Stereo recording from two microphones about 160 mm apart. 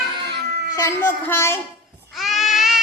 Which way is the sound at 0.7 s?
15° left (ahead or behind).